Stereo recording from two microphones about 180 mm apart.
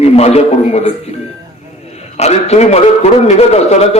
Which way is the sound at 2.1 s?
35° left (ahead or behind).